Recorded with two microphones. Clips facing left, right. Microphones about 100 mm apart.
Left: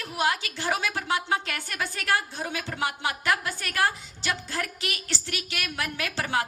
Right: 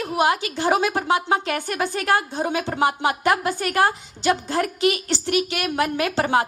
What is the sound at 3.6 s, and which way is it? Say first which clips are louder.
A woman's voice: right 5 dB; 45° right (ahead or behind).